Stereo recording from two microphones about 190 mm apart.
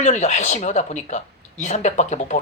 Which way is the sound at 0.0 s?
40° left (ahead or behind).